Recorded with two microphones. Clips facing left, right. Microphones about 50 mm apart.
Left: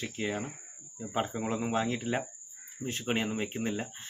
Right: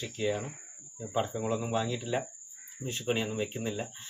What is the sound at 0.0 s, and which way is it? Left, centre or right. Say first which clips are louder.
Speech: right 2 dB; left.